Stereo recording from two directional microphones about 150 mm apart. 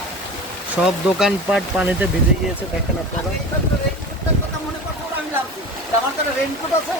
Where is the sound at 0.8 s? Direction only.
5° right (ahead or behind).